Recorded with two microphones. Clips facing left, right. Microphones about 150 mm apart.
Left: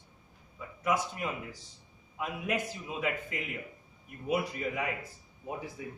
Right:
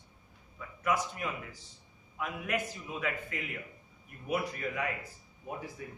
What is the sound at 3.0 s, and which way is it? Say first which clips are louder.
Speech: left 2 dB; 15° left (ahead or behind).